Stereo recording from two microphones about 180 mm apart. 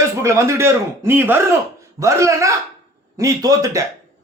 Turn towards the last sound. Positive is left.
turn(degrees=-15)  # may be behind; listen again after turning